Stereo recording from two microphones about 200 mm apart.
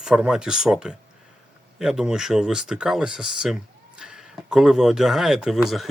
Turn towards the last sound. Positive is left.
turn(degrees=0)  # may be behind; listen again after turning